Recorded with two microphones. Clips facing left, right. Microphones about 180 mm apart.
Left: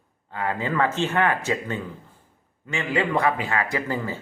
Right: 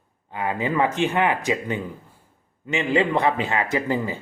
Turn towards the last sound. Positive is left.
turn(degrees=-15)  # may be behind; listen again after turning